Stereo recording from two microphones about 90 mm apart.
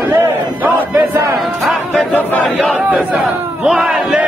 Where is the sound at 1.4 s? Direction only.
Centre (ahead or behind).